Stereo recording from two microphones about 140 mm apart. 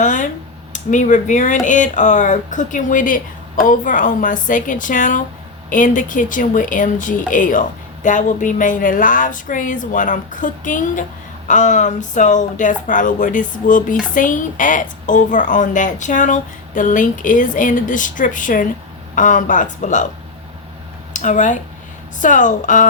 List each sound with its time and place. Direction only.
0.0 s a sound: 65° left (ahead or behind)
0.7 s a woman's voice: 65° left (ahead or behind)
21.1 s a woman's voice: 60° left (ahead or behind)